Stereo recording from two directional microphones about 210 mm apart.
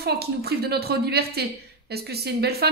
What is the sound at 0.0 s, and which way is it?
Speech, 50° right (ahead or behind).